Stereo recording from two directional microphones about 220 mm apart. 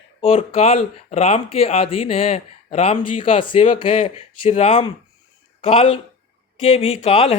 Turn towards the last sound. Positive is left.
turn(degrees=25)  # may be behind; listen again after turning